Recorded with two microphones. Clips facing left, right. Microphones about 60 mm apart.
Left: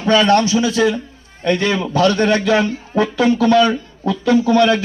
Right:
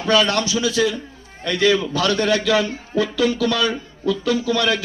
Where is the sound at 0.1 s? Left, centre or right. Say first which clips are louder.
Left 5 dB; left.